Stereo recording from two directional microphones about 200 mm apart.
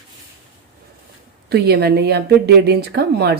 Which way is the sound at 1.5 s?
55° right (ahead or behind).